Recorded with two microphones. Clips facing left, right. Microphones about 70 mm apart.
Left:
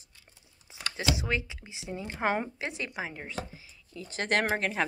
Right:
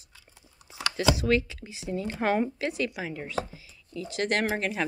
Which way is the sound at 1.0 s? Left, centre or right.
Centre.